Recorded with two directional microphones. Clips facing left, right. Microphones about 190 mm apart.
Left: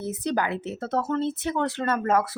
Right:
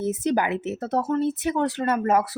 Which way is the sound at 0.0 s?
20° right (ahead or behind).